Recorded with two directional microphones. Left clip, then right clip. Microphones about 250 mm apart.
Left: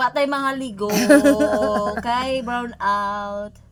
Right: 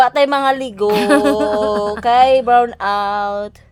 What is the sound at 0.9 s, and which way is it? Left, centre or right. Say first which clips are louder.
Speech: right 1 dB; centre.